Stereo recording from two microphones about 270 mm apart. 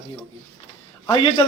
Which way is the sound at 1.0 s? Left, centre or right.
Centre.